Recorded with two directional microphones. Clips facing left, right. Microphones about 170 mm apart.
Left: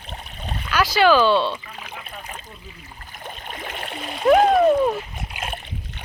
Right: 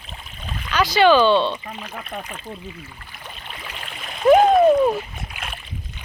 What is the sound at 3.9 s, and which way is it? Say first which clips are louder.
Splash: left 5 dB; 35° left (ahead or behind).